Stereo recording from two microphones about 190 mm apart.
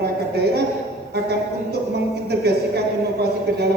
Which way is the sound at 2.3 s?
60° right (ahead or behind).